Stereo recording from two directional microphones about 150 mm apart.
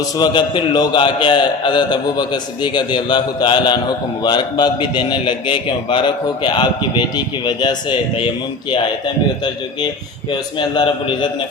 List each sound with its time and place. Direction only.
0.2 s a man's voice: 30° left (ahead or behind)
10.6 s a man's voice: 30° left (ahead or behind)